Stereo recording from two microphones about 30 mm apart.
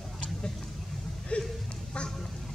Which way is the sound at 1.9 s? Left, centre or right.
Left.